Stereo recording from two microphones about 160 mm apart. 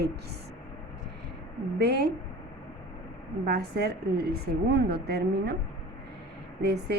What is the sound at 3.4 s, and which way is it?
A woman's voice, 85° right.